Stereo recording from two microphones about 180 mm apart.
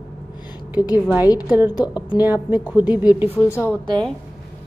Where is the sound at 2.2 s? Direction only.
10° right (ahead or behind).